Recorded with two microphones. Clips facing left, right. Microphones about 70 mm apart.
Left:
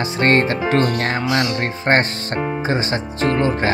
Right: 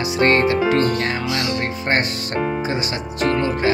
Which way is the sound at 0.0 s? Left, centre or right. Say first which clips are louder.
Even; left.